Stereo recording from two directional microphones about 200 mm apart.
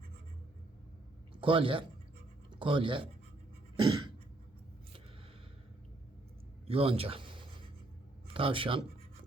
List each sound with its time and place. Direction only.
1.4 s speech: 25° right (ahead or behind)
3.8 s cough: 25° right (ahead or behind)
6.7 s speech: 30° right (ahead or behind)